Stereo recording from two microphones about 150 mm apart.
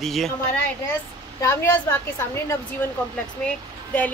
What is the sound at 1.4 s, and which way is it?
A woman's voice, 15° left (ahead or behind).